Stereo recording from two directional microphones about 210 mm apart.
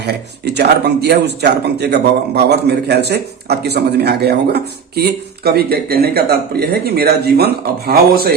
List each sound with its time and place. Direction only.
0.0 s a man's voice: 50° right (ahead or behind)